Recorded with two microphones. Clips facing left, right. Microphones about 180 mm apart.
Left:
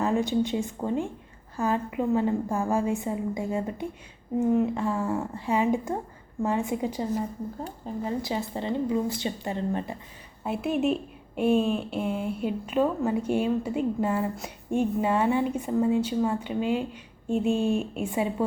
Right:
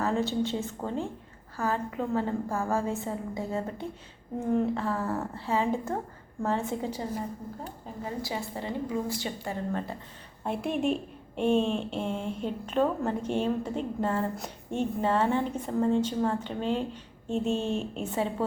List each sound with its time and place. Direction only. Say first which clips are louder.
0.0 s a woman's voice: left 3 dB; 15° left (ahead or behind)
8.2 s a woman's voice: left 4 dB; 20° left (ahead or behind)
10.4 s a woman's voice: left 3 dB; 5° left (ahead or behind)